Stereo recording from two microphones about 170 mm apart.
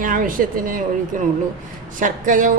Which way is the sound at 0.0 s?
55° right (ahead or behind).